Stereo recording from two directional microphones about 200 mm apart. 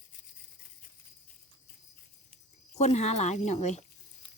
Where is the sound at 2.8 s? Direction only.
35° left (ahead or behind).